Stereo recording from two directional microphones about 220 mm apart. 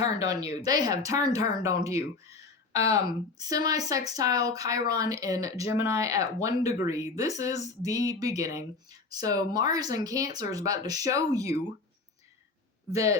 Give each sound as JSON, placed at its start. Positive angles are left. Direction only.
{"t": 0.3, "sound": "speech", "side_deg": -15}
{"t": 12.9, "sound": "speech", "side_deg": -15}